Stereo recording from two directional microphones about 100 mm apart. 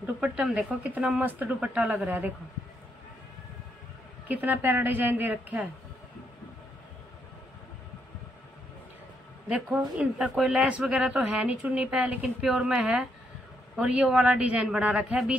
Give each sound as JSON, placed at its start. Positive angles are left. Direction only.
{"t": 0.0, "sound": "speech", "side_deg": -10}
{"t": 4.3, "sound": "speech", "side_deg": -15}
{"t": 9.5, "sound": "speech", "side_deg": -10}